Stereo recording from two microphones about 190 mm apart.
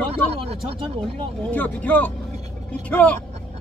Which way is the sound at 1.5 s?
10° left (ahead or behind).